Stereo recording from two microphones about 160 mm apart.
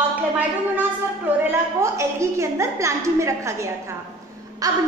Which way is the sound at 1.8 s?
20° right (ahead or behind).